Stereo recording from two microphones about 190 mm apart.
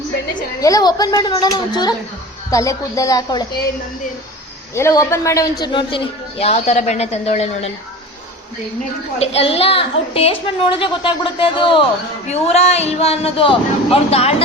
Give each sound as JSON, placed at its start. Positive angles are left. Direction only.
{"t": 0.6, "sound": "a woman's voice", "side_deg": 20}
{"t": 4.7, "sound": "a woman's voice", "side_deg": 15}
{"t": 9.1, "sound": "a woman's voice", "side_deg": 30}